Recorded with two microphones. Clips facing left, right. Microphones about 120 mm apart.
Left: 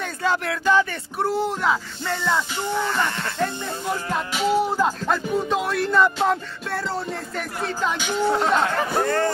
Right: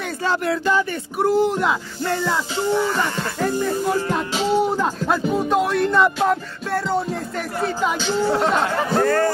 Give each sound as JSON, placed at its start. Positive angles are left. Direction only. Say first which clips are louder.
{"t": 0.3, "sound": "speech", "louder": "right 1 dB", "side_deg": -5}
{"t": 2.5, "sound": "a sound", "louder": "right 5 dB", "side_deg": -20}
{"t": 3.3, "sound": "speech", "louder": "right 5 dB", "side_deg": -5}
{"t": 4.3, "sound": "a sound", "louder": "left 1 dB", "side_deg": -25}
{"t": 4.7, "sound": "speech", "louder": "right 1 dB", "side_deg": -5}
{"t": 8.0, "sound": "speech", "louder": "right 2 dB", "side_deg": 15}
{"t": 8.4, "sound": "speech", "louder": "right 1 dB", "side_deg": 0}
{"t": 9.0, "sound": "a man's voice", "louder": "right 5 dB", "side_deg": 25}